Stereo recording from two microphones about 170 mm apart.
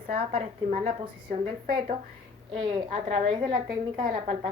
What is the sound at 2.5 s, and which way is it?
Speech, 30° right (ahead or behind).